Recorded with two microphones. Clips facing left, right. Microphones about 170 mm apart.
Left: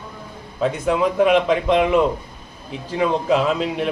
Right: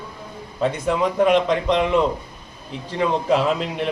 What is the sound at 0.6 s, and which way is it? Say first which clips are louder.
Speech: left 2 dB; centre (ahead or behind).